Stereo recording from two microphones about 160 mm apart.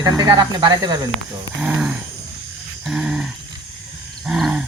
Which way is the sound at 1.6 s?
5° right (ahead or behind).